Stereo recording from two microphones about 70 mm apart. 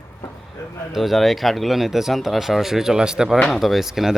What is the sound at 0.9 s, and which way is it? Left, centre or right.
Speech, centre.